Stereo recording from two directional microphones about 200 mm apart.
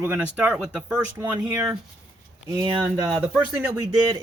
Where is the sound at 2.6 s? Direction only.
20° right (ahead or behind).